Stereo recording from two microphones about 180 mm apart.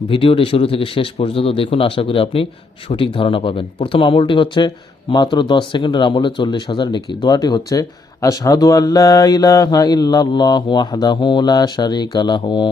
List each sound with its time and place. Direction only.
0.1 s a man's voice: 30° left (ahead or behind)